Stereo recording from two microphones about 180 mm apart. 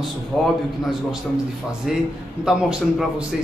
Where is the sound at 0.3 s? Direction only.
5° left (ahead or behind).